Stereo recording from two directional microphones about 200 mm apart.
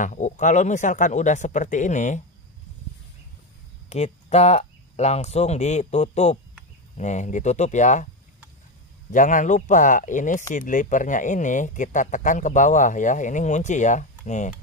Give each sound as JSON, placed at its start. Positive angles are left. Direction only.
{"t": 0.0, "sound": "speech", "side_deg": 40}
{"t": 3.9, "sound": "speech", "side_deg": 35}
{"t": 9.1, "sound": "speech", "side_deg": 40}